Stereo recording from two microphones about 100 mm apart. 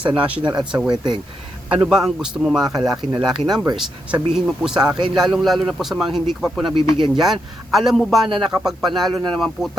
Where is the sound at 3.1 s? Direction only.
45° right (ahead or behind).